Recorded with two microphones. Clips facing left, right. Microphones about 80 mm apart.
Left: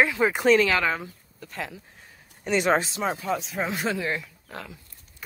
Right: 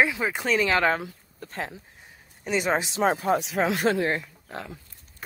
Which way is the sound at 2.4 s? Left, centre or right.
Centre.